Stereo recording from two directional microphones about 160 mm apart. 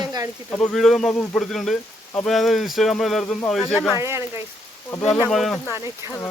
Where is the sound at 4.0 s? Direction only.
15° right (ahead or behind).